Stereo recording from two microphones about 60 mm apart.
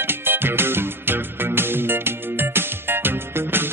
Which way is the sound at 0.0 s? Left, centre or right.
Right.